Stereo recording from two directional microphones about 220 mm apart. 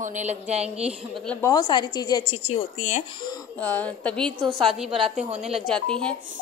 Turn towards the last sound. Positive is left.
turn(degrees=5)  # may be behind; listen again after turning